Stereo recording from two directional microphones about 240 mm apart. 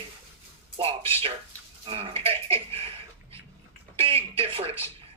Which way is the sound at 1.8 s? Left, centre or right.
Right.